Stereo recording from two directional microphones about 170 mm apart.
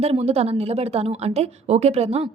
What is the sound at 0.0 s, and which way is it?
A woman's voice, 35° right (ahead or behind).